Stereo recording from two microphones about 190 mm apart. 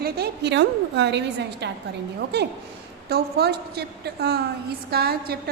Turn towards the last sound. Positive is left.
turn(degrees=-55)  # may be behind; listen again after turning